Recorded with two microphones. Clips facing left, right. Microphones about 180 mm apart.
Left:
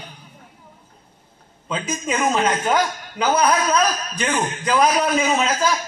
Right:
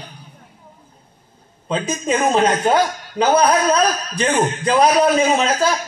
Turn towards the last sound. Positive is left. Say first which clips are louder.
# right 3 dB
turn(degrees=-30)  # may be behind; listen again after turning